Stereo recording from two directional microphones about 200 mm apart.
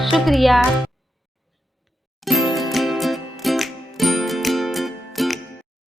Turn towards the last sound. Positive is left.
turn(degrees=0)  # may be behind; listen again after turning